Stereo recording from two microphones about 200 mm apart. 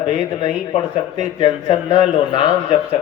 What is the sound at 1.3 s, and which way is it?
Speech, 25° left (ahead or behind).